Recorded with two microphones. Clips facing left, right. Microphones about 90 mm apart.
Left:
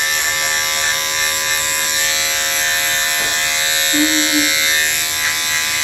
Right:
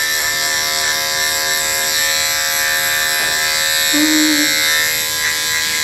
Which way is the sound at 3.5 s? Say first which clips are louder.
Right 1 dB; 15° right (ahead or behind).